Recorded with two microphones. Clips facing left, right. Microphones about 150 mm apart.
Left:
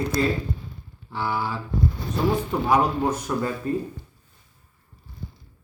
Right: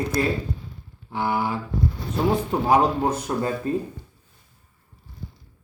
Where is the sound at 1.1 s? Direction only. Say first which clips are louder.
Right 3 dB; 15° right (ahead or behind).